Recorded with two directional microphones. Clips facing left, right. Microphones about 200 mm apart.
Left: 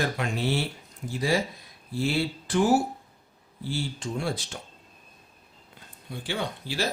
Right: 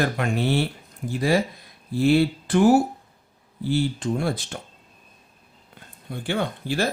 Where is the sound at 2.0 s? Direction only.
55° right (ahead or behind).